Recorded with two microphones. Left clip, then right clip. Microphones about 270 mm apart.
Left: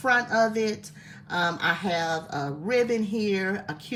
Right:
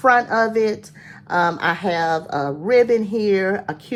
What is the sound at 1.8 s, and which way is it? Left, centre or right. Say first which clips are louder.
Speech: right 7 dB; centre.